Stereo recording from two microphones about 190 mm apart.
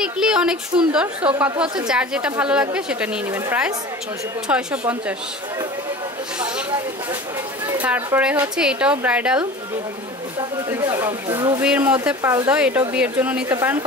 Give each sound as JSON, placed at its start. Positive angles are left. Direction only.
{"t": 0.0, "sound": "a woman's voice", "side_deg": -5}
{"t": 7.6, "sound": "a woman's voice", "side_deg": -10}
{"t": 10.7, "sound": "a woman's voice", "side_deg": -15}
{"t": 11.6, "sound": "a woman's voice", "side_deg": -5}